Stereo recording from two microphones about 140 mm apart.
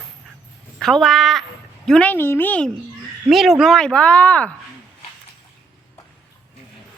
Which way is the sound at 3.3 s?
Centre (ahead or behind).